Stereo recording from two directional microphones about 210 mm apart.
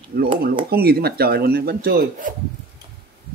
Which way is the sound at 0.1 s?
45° right (ahead or behind).